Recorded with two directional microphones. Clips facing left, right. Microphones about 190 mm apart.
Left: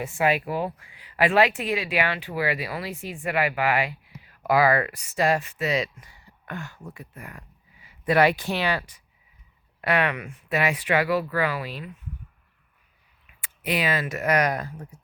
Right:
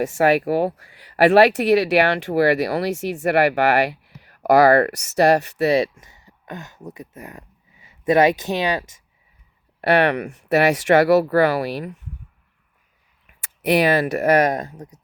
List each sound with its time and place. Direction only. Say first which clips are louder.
0.0 s speech: right 7 dB; 75° right (ahead or behind)
5.6 s speech: right 9 dB; 30° right (ahead or behind)
9.8 s speech: right 7 dB; 65° right (ahead or behind)
13.6 s speech: right 9 dB; 70° right (ahead or behind)
14.0 s speech: right 7 dB; 35° right (ahead or behind)
14.8 s speech: right 3 dB; 40° right (ahead or behind)